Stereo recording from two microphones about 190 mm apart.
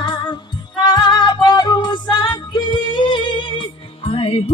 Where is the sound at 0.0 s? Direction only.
25° left (ahead or behind).